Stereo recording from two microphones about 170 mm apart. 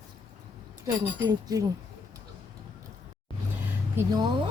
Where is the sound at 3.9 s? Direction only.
25° right (ahead or behind).